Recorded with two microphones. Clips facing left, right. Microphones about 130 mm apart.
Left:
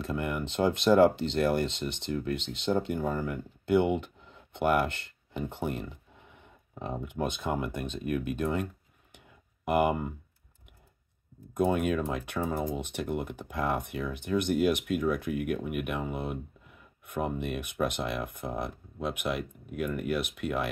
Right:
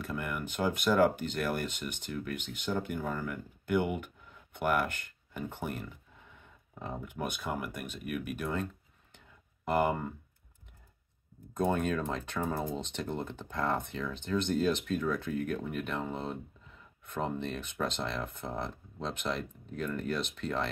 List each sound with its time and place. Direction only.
0.0 s speech: 20° left (ahead or behind)
9.7 s speech: 15° left (ahead or behind)
11.5 s speech: 10° left (ahead or behind)